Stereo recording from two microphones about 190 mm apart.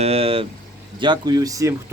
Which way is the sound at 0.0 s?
30° right (ahead or behind).